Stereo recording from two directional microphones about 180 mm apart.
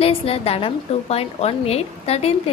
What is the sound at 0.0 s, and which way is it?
A woman's voice, 35° left (ahead or behind).